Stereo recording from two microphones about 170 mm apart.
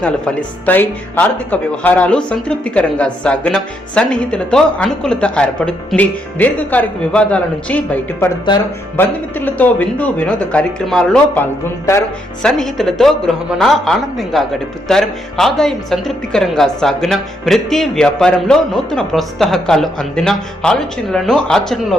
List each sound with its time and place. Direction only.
0.0 s speech: 5° left (ahead or behind)
9.0 s speech: 10° left (ahead or behind)
11.9 s speech: 20° left (ahead or behind)
12.4 s a woman's voice: 5° left (ahead or behind)